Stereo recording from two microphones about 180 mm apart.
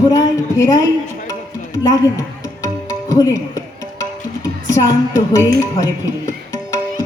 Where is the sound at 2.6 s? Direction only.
20° left (ahead or behind).